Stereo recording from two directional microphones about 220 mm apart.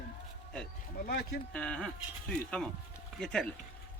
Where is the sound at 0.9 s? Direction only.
45° left (ahead or behind).